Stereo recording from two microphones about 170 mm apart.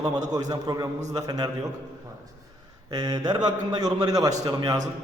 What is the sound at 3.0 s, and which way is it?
Mantra, 25° right (ahead or behind).